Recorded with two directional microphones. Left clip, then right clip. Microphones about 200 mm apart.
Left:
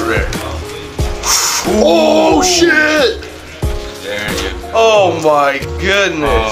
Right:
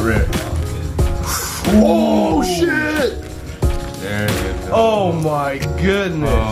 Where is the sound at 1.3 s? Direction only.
15° left (ahead or behind).